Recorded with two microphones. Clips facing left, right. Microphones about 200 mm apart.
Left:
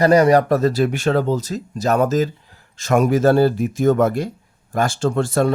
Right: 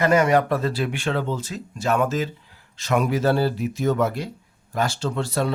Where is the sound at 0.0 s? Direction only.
35° left (ahead or behind).